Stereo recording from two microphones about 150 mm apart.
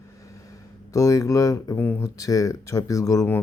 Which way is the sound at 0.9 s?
20° left (ahead or behind).